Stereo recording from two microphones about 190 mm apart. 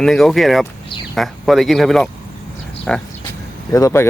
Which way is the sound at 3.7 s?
15° left (ahead or behind).